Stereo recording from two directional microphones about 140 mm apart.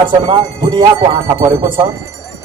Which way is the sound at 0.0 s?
40° right (ahead or behind).